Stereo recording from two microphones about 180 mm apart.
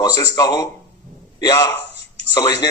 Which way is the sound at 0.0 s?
20° left (ahead or behind).